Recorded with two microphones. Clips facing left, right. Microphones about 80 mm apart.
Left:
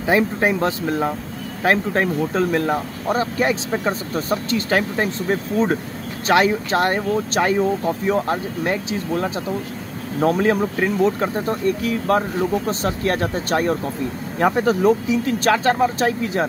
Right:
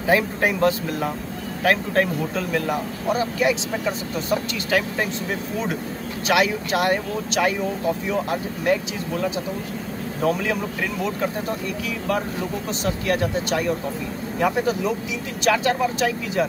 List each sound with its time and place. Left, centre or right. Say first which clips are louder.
0.0 s speech: left 2 dB; left
10.2 s speech: left 5 dB; left